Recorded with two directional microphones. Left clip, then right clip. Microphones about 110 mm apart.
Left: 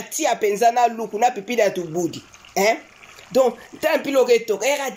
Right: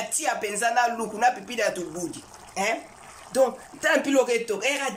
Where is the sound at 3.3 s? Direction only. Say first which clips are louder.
Left 4 dB; 20° left (ahead or behind).